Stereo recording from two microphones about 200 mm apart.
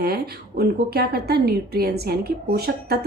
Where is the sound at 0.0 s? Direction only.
50° right (ahead or behind).